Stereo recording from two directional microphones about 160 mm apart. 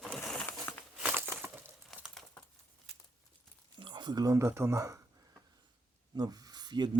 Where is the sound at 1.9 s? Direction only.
Centre (ahead or behind).